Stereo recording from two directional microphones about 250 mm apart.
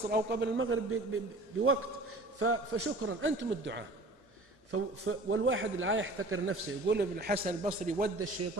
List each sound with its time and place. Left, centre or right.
0.1 s a man's voice: right
4.6 s a man's voice: right
6.9 s a man's voice: right